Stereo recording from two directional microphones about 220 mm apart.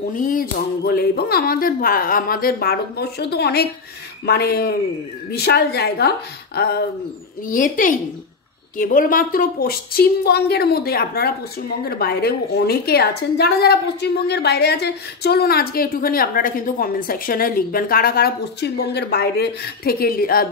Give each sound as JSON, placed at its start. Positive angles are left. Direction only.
{"t": 0.1, "sound": "a woman's voice", "side_deg": 40}